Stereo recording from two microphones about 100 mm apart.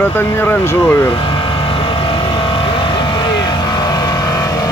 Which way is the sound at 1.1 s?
55° left (ahead or behind).